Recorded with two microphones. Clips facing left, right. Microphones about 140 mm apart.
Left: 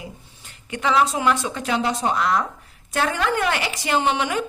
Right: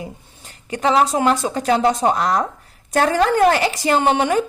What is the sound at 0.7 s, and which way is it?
A woman's voice, 35° right (ahead or behind).